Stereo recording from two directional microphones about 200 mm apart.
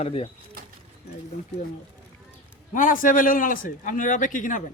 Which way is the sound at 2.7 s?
40° left (ahead or behind).